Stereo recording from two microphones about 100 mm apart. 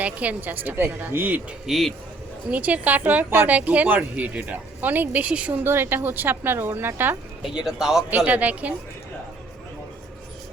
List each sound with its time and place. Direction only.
0.0 s speech: 15° right (ahead or behind)
1.6 s speech: centre (ahead or behind)
2.5 s speech: 15° right (ahead or behind)
7.4 s speech: 5° right (ahead or behind)
8.1 s speech: 15° right (ahead or behind)